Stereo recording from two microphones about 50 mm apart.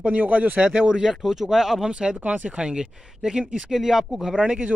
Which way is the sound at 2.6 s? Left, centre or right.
Centre.